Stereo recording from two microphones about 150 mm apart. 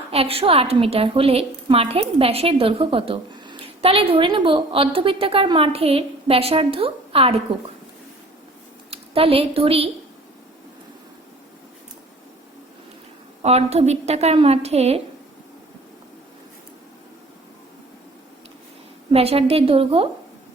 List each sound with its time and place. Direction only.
0.1 s a woman's voice: 40° right (ahead or behind)
8.9 s a woman's voice: 40° right (ahead or behind)
13.4 s a woman's voice: 45° right (ahead or behind)
19.1 s a woman's voice: 40° right (ahead or behind)